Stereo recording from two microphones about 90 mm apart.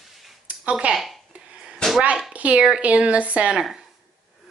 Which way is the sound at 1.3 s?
10° right (ahead or behind).